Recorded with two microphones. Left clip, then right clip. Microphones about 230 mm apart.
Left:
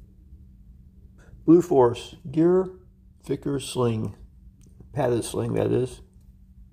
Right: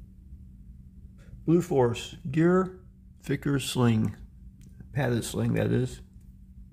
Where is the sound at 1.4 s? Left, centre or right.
Centre.